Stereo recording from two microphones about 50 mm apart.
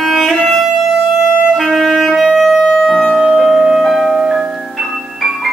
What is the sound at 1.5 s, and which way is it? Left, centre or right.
Music, centre.